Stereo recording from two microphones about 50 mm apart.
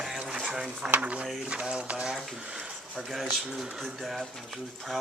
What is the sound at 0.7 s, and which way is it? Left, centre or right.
Speech, right.